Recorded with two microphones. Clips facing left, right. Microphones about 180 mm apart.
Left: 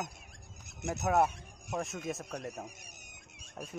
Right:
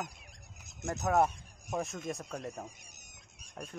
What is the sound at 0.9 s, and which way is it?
Speech, 5° left (ahead or behind).